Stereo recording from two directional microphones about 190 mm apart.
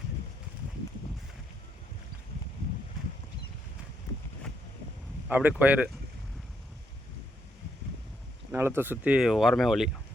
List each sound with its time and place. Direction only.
5.3 s speech: 10° right (ahead or behind)
8.5 s speech: 10° right (ahead or behind)